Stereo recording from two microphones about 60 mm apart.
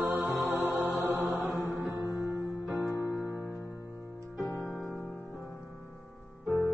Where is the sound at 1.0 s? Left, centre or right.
Centre.